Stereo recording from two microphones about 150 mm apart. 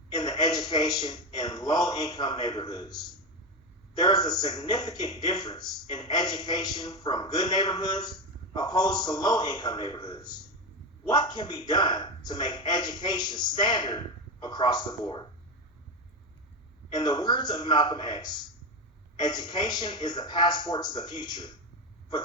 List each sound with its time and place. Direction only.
0.1 s a man's voice: 25° left (ahead or behind)
16.9 s a man's voice: 30° left (ahead or behind)